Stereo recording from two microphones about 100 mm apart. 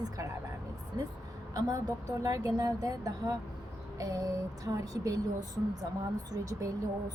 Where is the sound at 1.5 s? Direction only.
35° right (ahead or behind).